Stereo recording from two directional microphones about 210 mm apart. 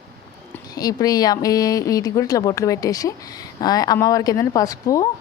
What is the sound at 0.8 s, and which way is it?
A woman's voice, 20° left (ahead or behind).